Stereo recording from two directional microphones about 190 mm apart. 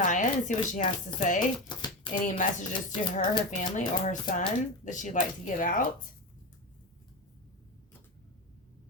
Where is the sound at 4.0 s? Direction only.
40° left (ahead or behind).